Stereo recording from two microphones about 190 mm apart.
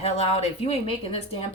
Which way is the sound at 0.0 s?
30° left (ahead or behind).